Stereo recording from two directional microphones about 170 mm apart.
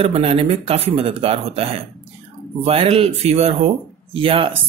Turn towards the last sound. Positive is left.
turn(degrees=-30)  # may be behind; listen again after turning